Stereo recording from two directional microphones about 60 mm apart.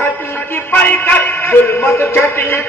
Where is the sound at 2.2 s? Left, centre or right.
Left.